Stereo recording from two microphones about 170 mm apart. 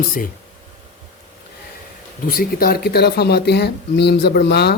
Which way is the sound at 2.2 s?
60° left (ahead or behind).